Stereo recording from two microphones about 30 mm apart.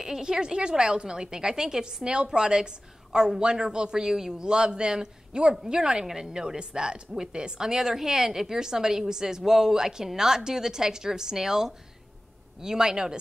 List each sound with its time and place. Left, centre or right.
0.0 s a woman's voice: centre
4.0 s a woman's voice: centre